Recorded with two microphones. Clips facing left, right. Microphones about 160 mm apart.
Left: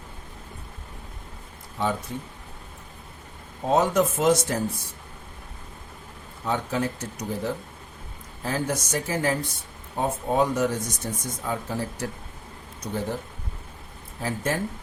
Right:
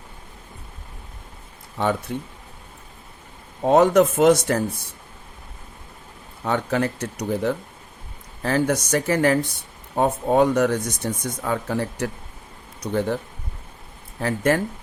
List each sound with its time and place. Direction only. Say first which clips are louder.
1.8 s speech: right 4 dB; 60° right (ahead or behind)
3.7 s speech: right 6 dB; 65° right (ahead or behind)
6.4 s speech: right 4 dB; 65° right (ahead or behind)
14.2 s speech: right 7 dB; 70° right (ahead or behind)